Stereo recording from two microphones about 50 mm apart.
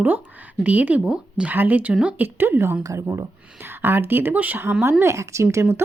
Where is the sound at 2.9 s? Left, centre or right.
Right.